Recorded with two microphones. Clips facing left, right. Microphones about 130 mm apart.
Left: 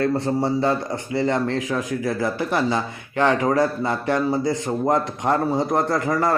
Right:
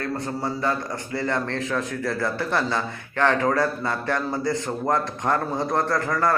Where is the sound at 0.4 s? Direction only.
25° left (ahead or behind).